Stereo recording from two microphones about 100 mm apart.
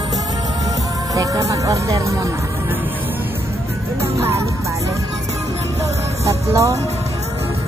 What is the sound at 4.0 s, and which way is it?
Music, 25° right (ahead or behind).